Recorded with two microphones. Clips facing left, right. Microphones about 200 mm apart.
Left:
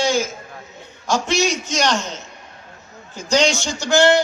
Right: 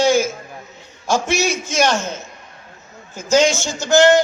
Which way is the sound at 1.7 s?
15° right (ahead or behind).